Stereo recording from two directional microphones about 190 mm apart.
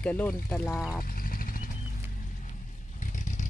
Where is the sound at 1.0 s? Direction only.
50° left (ahead or behind).